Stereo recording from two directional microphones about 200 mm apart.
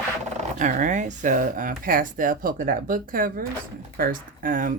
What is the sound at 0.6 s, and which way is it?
Speech, 40° right (ahead or behind).